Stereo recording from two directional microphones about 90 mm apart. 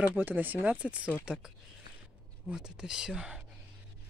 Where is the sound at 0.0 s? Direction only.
20° right (ahead or behind).